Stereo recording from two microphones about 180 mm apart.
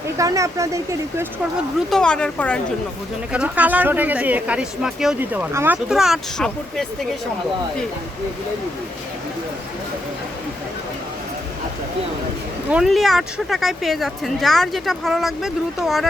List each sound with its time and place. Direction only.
0.2 s speech: 15° right (ahead or behind)
1.9 s a woman's voice: 5° left (ahead or behind)
3.3 s speech: 5° right (ahead or behind)
12.7 s a woman's voice: centre (ahead or behind)